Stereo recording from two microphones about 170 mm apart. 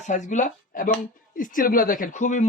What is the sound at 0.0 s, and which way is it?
A man's voice, 45° left (ahead or behind).